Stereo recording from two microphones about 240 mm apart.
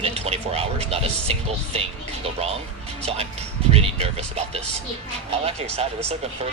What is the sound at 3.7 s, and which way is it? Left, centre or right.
Speech, right.